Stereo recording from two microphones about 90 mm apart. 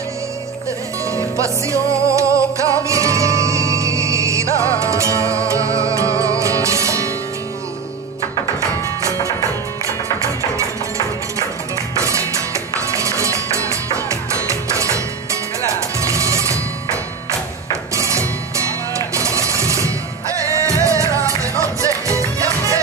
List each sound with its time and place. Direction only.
1.1 s music: 35° right (ahead or behind)
8.5 s music: 35° right (ahead or behind)
12.0 s music: 35° right (ahead or behind)
16.0 s music: 35° right (ahead or behind)